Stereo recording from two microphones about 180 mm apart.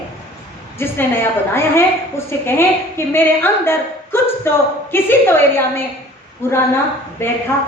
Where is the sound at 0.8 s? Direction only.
15° left (ahead or behind).